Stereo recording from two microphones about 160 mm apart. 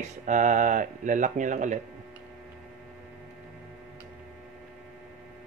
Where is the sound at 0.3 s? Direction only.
50° right (ahead or behind).